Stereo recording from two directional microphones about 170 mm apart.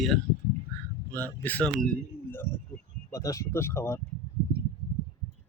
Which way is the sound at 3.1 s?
20° left (ahead or behind).